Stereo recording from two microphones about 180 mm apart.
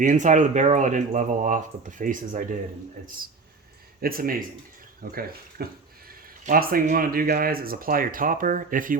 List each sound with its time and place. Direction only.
0.0 s speech: 45° right (ahead or behind)
4.0 s speech: 55° right (ahead or behind)